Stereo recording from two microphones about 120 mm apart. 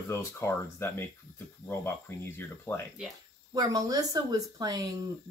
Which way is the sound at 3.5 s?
30° right (ahead or behind).